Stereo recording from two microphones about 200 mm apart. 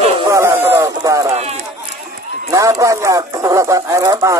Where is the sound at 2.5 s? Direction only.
15° right (ahead or behind).